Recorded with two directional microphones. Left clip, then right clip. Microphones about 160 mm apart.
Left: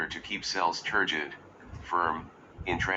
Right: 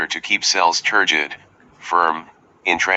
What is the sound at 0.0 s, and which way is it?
Speech, 40° right (ahead or behind).